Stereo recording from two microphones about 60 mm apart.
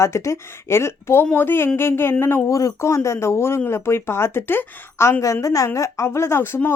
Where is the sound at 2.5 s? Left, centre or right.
Left.